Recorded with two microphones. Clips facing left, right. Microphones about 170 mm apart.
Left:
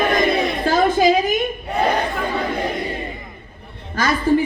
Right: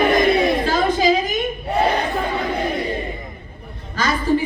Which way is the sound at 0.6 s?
50° left (ahead or behind).